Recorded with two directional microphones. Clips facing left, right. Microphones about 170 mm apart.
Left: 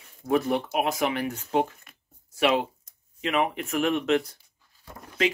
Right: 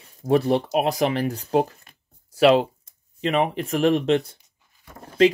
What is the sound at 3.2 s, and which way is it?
Speech, 35° right (ahead or behind).